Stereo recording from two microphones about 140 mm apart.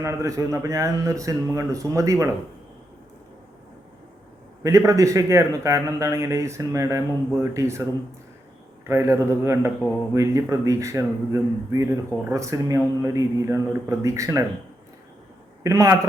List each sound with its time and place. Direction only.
0.0 s a man's voice: 20° right (ahead or behind)
4.6 s a man's voice: 25° right (ahead or behind)
8.9 s a man's voice: 20° right (ahead or behind)
15.6 s a man's voice: 20° right (ahead or behind)